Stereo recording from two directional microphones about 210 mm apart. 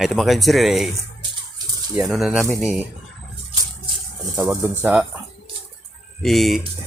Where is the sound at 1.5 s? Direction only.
15° right (ahead or behind).